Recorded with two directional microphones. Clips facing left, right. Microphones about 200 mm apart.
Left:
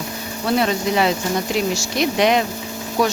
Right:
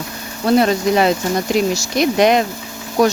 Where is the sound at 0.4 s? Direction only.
45° right (ahead or behind).